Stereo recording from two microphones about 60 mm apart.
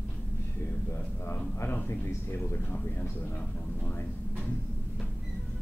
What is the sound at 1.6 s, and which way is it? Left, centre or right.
Speech, left.